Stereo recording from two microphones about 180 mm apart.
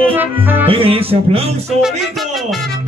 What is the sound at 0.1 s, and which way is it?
Music, 10° right (ahead or behind).